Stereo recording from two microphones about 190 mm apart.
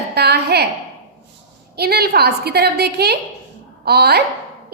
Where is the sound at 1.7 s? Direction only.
55° right (ahead or behind).